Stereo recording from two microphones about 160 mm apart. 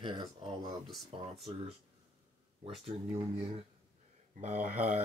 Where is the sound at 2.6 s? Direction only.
35° right (ahead or behind).